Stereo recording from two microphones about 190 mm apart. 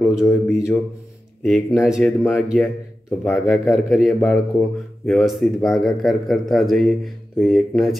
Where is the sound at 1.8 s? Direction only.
5° right (ahead or behind).